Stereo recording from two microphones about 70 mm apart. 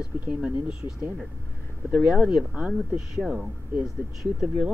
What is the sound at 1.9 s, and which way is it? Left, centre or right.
Speech, centre.